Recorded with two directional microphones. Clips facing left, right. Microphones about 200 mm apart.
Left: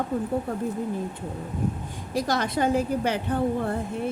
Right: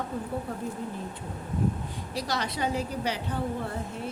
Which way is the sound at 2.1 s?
50° left (ahead or behind).